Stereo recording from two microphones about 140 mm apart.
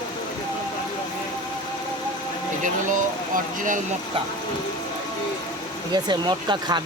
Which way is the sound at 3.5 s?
65° right (ahead or behind).